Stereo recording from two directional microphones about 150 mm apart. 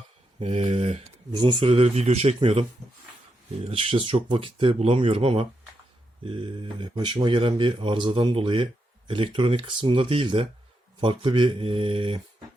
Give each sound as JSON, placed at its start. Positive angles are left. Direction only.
{"t": 0.3, "sound": "speech", "side_deg": -45}
{"t": 1.3, "sound": "speech", "side_deg": -30}